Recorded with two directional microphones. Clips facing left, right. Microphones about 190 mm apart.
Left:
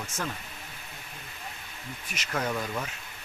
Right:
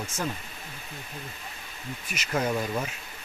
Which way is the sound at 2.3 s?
20° right (ahead or behind).